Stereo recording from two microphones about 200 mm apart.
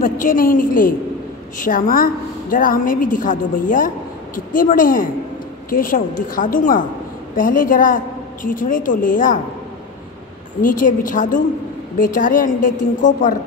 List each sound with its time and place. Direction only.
0.0 s a woman's voice: 40° left (ahead or behind)
10.6 s a woman's voice: 40° left (ahead or behind)